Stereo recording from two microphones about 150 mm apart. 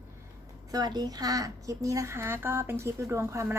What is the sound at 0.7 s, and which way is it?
A woman's voice, 25° right (ahead or behind).